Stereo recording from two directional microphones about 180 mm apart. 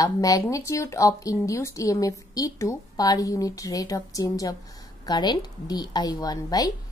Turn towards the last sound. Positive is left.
turn(degrees=20)  # may be behind; listen again after turning